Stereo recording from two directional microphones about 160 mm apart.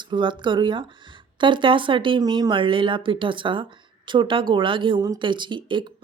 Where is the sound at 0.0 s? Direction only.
30° right (ahead or behind).